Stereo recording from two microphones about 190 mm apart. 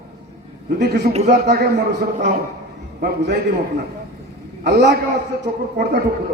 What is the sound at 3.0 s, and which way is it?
Speech, 60° right (ahead or behind).